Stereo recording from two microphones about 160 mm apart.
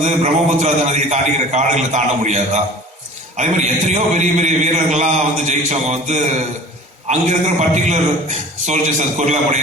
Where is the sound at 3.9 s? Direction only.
50° right (ahead or behind).